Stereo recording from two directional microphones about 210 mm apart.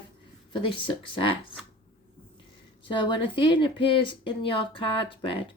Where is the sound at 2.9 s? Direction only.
25° left (ahead or behind).